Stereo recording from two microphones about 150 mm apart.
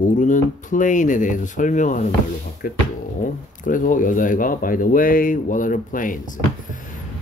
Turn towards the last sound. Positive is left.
turn(degrees=60)  # may be behind; listen again after turning